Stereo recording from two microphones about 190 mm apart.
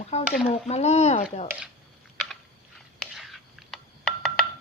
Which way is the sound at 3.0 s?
Centre (ahead or behind).